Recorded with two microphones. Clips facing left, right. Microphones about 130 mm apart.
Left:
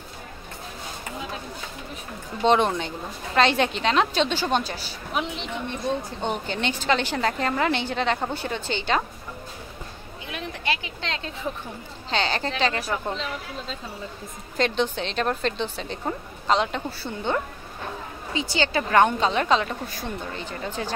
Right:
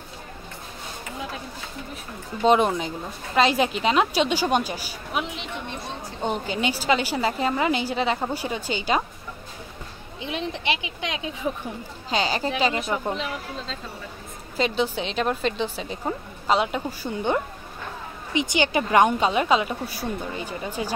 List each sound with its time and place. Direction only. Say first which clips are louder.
2.4 s a woman's voice: right 1 dB; 5° right (ahead or behind)
10.2 s a woman's voice: right 3 dB; 25° right (ahead or behind)
14.6 s a woman's voice: even; 5° right (ahead or behind)